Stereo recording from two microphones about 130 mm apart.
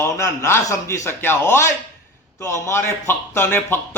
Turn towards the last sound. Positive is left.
turn(degrees=20)  # may be behind; listen again after turning